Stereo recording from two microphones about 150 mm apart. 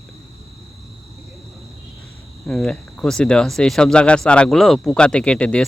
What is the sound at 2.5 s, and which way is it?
Speech, 5° left (ahead or behind).